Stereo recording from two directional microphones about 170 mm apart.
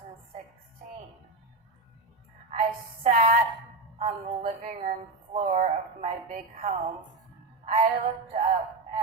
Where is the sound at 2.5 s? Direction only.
40° right (ahead or behind).